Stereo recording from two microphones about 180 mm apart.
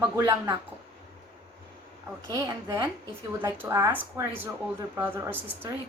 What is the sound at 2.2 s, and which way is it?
Speech, 20° right (ahead or behind).